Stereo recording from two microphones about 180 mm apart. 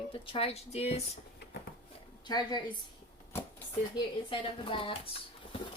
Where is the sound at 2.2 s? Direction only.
25° left (ahead or behind).